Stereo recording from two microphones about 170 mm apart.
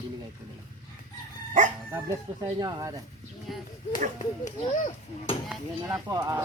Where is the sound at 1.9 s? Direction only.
15° right (ahead or behind).